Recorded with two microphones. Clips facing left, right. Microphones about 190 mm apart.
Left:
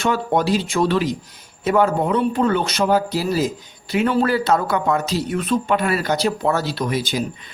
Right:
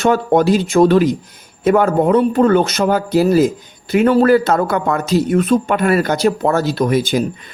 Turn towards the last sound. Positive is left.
turn(degrees=-50)  # may be behind; listen again after turning